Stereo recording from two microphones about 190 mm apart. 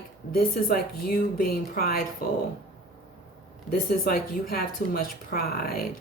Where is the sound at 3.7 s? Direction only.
50° left (ahead or behind).